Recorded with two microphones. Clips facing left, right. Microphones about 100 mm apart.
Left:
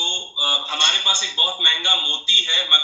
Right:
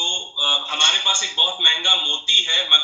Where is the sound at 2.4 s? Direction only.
55° right (ahead or behind).